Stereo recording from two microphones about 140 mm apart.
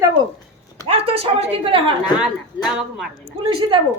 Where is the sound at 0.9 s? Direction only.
45° right (ahead or behind).